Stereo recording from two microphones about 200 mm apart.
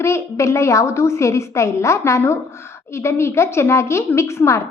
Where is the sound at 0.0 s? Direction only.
15° left (ahead or behind).